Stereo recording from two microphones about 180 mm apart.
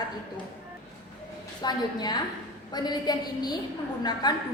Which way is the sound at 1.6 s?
25° left (ahead or behind).